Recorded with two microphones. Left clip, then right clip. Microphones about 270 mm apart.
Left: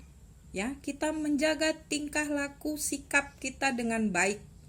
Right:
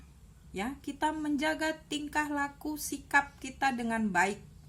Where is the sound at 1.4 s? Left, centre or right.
Right.